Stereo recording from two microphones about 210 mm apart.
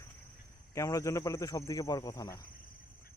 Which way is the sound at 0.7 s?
15° left (ahead or behind).